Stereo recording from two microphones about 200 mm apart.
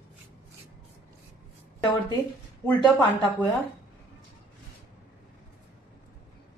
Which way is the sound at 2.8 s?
25° left (ahead or behind).